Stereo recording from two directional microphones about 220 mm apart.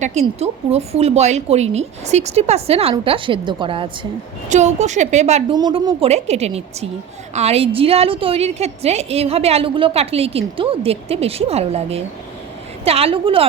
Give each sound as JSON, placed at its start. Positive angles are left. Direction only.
{"t": 0.0, "sound": "a woman's voice", "side_deg": -30}
{"t": 4.4, "sound": "a woman's voice", "side_deg": -35}
{"t": 5.5, "sound": "a woman's voice", "side_deg": -20}